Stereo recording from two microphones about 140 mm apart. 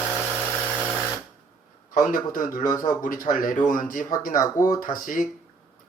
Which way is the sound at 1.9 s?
75° left (ahead or behind).